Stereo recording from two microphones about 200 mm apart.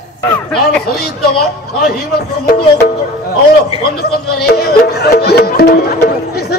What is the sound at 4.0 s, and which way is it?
Music, 50° left (ahead or behind).